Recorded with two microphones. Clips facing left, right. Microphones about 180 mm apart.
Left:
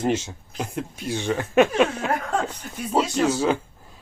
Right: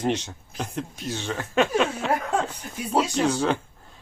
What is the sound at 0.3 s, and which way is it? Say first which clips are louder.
Speech: left 2 dB; 5° left (ahead or behind).